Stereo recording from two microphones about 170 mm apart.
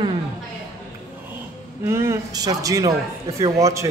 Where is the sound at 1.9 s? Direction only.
15° right (ahead or behind).